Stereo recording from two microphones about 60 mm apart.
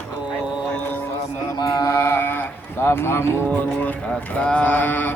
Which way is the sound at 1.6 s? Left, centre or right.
Left.